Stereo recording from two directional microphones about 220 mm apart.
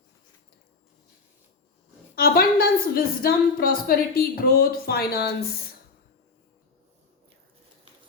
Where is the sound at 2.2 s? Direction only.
45° left (ahead or behind).